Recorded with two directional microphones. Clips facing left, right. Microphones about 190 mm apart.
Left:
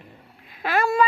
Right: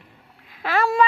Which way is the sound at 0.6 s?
10° left (ahead or behind).